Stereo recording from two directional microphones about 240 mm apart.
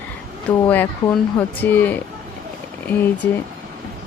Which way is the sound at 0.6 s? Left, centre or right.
Centre.